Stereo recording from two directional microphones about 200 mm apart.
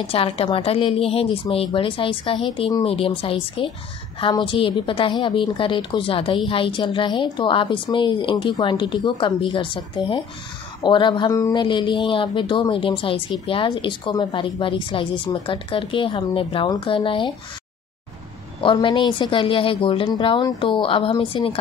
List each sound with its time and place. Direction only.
0.0 s speech: 30° left (ahead or behind)
18.6 s speech: 25° left (ahead or behind)